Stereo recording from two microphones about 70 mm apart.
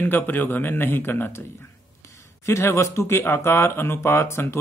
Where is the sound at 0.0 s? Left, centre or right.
Left.